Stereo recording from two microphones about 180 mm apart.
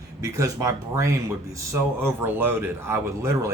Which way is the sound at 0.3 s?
20° right (ahead or behind).